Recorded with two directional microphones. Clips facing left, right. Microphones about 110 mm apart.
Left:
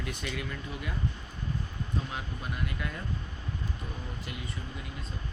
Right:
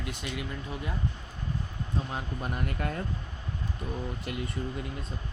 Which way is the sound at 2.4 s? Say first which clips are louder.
Right 4 dB; 45° right (ahead or behind).